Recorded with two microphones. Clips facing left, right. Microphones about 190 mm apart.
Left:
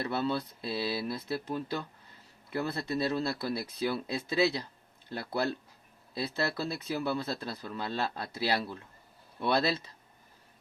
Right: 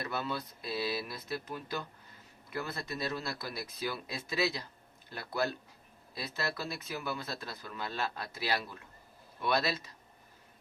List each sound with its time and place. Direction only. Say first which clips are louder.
0.0 s speech: left 5 dB; 30° left (ahead or behind)